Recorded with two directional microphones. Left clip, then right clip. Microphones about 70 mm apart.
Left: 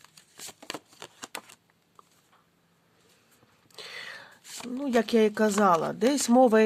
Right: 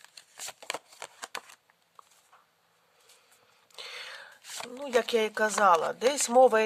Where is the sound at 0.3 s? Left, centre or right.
Right.